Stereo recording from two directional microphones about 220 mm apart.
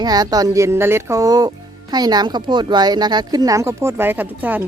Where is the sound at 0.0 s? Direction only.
15° right (ahead or behind).